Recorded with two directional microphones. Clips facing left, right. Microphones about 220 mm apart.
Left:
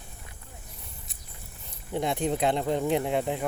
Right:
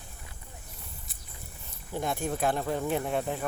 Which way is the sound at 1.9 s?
20° left (ahead or behind).